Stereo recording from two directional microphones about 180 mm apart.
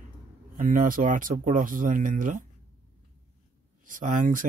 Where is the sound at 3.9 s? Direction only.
45° right (ahead or behind).